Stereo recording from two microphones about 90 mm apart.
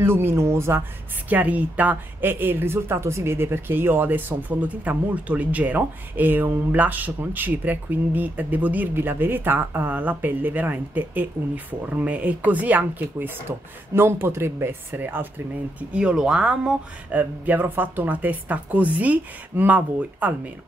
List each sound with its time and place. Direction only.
0.0 s speech: 25° right (ahead or behind)
1.3 s speech: 15° right (ahead or behind)
15.9 s speech: 10° right (ahead or behind)